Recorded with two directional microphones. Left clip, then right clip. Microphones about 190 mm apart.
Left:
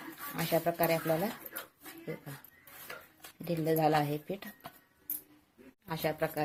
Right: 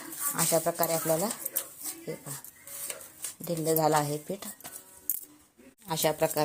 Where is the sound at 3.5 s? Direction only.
10° right (ahead or behind).